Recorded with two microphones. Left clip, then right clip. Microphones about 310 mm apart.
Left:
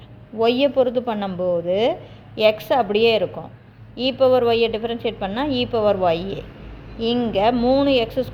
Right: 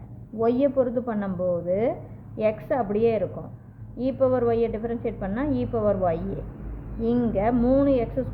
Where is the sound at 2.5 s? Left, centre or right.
Centre.